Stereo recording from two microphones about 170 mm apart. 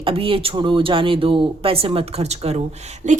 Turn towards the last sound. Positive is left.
turn(degrees=-45)  # may be behind; listen again after turning